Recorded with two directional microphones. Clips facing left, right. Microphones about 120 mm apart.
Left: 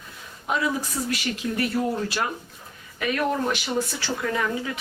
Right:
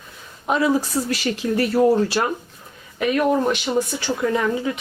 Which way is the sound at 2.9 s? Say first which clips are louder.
Right 6 dB; 20° right (ahead or behind).